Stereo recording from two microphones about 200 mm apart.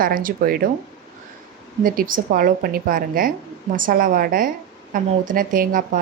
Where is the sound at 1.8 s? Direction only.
45° right (ahead or behind).